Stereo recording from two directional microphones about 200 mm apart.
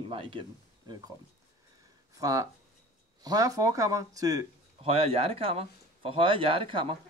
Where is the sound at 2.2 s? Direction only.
15° right (ahead or behind).